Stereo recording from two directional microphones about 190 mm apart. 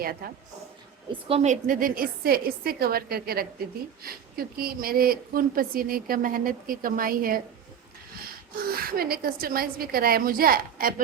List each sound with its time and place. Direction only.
0.0 s a woman's voice: 50° right (ahead or behind)
1.1 s a woman's voice: 30° right (ahead or behind); by 7.4 s 50° right (ahead or behind)
8.5 s a woman's voice: 50° right (ahead or behind)